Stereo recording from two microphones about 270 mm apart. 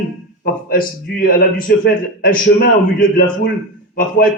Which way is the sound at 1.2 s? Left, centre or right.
Left.